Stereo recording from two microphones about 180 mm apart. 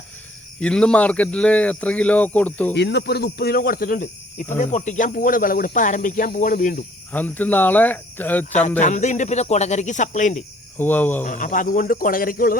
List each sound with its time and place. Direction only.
0.6 s speech: 5° left (ahead or behind)
2.7 s speech: 70° left (ahead or behind); by 6.8 s 50° left (ahead or behind)
7.1 s speech: 10° left (ahead or behind)
8.8 s speech: 40° left (ahead or behind)
10.8 s speech: 10° left (ahead or behind)
11.2 s speech: 45° left (ahead or behind)